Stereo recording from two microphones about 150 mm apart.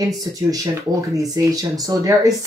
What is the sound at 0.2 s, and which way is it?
Speech, 25° right (ahead or behind).